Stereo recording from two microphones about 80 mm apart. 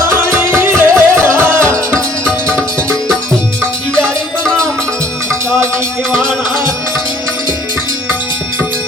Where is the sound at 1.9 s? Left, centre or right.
Centre.